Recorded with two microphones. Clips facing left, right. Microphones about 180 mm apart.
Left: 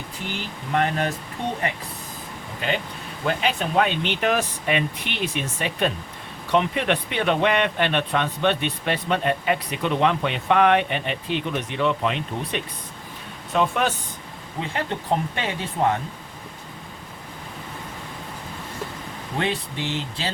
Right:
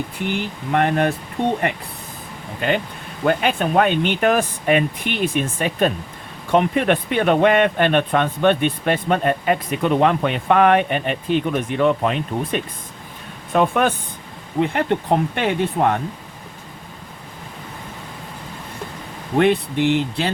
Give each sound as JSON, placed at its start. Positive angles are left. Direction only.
{"t": 0.7, "sound": "speech", "side_deg": -60}
{"t": 2.6, "sound": "speech", "side_deg": -50}
{"t": 19.4, "sound": "speech", "side_deg": -60}